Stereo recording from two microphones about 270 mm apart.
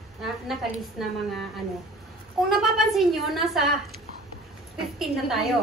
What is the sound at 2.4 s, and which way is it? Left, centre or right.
A woman's voice, centre.